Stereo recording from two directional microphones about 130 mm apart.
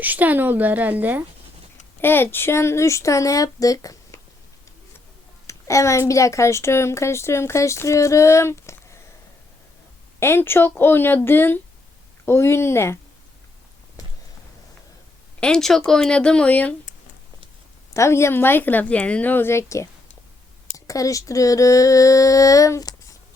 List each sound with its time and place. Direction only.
0.0 s a woman's voice: 10° right (ahead or behind)
2.0 s a woman's voice: 15° left (ahead or behind)
5.5 s a woman's voice: 25° left (ahead or behind)
10.2 s a woman's voice: 20° left (ahead or behind)
15.4 s a woman's voice: 5° left (ahead or behind)
17.9 s a woman's voice: 20° left (ahead or behind)